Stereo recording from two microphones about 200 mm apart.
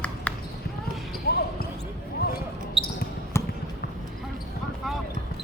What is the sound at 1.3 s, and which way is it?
Basketball bounce, 50° left (ahead or behind).